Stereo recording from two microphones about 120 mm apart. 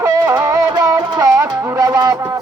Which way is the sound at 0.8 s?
30° right (ahead or behind).